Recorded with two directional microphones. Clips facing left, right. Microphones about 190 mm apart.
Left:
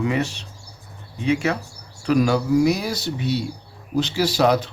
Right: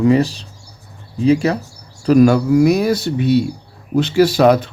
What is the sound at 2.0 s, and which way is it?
Speech, 50° right (ahead or behind).